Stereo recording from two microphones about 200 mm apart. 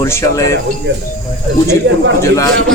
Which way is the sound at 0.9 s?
60° right (ahead or behind).